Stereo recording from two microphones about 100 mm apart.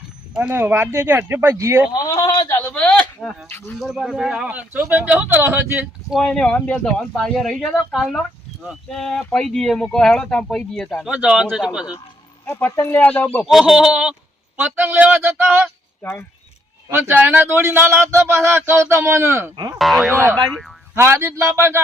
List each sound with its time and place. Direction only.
0.3 s speech: 20° right (ahead or behind)
1.9 s a man's voice: 35° left (ahead or behind)
2.6 s speech: 15° left (ahead or behind)
3.8 s speech: centre (ahead or behind); by 5.8 s 20° right (ahead or behind)
6.2 s speech: 10° left (ahead or behind)
11.0 s speech: 10° right (ahead or behind)
12.5 s speech: 20° left (ahead or behind)
13.4 s speech: centre (ahead or behind)
14.5 s speech: 20° right (ahead or behind)
17.2 s speech: 20° right (ahead or behind)
19.8 s speech: centre (ahead or behind)
20.9 s speech: 25° right (ahead or behind)